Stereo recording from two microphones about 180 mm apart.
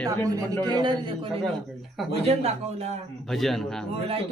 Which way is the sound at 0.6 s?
25° right (ahead or behind).